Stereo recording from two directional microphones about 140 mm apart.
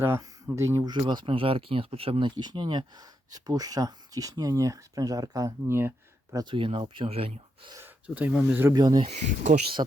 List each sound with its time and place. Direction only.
0.0 s speech: 15° right (ahead or behind)
6.3 s speech: 35° right (ahead or behind)
7.8 s speech: 10° right (ahead or behind)
8.7 s speech: 30° right (ahead or behind)
9.0 s speech: 55° right (ahead or behind)